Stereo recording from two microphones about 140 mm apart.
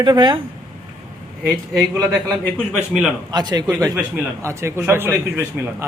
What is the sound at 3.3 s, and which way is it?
A man's voice, 30° right (ahead or behind).